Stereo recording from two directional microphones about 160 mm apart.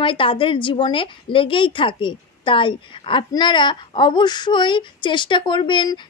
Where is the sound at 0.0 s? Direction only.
35° left (ahead or behind).